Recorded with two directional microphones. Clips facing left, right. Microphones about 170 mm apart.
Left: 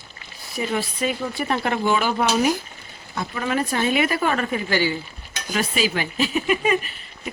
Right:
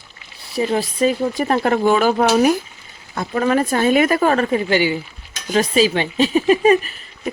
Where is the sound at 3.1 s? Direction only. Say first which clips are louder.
Right 7 dB; 50° right (ahead or behind).